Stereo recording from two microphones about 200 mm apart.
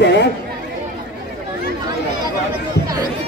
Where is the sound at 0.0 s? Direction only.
60° left (ahead or behind).